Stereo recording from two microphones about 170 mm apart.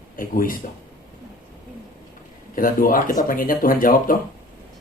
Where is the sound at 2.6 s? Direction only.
55° left (ahead or behind).